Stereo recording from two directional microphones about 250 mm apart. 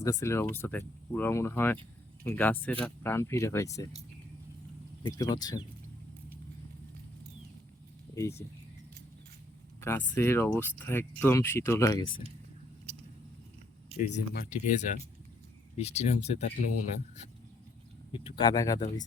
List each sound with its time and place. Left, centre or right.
0.0 s speech: centre
5.0 s speech: centre
8.1 s speech: centre
9.8 s speech: centre
13.9 s speech: left
18.1 s speech: centre